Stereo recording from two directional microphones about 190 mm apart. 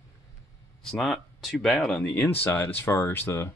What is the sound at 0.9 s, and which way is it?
Speech, centre (ahead or behind).